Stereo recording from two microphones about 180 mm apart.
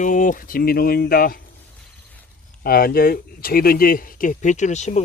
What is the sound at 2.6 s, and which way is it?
Speech, 55° left (ahead or behind).